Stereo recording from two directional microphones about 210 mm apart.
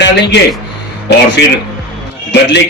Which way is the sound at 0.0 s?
55° left (ahead or behind).